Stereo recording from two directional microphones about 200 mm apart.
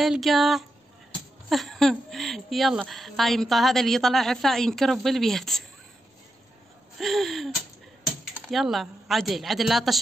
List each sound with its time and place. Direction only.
0.0 s speech: centre (ahead or behind)
7.0 s speech: centre (ahead or behind)